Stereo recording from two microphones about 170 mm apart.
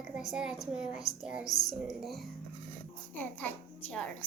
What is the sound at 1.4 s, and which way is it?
Speech, 20° left (ahead or behind).